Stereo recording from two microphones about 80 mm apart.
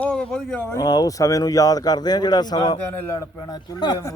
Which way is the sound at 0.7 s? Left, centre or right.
Left.